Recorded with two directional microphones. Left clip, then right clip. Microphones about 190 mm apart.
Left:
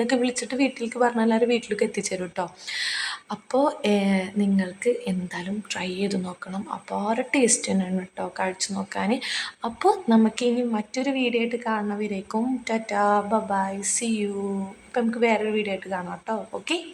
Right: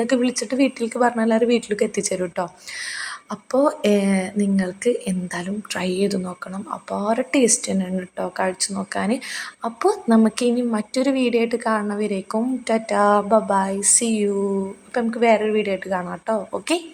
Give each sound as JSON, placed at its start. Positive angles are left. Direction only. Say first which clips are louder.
{"t": 0.0, "sound": "a woman's voice", "louder": "right 3 dB", "side_deg": -10}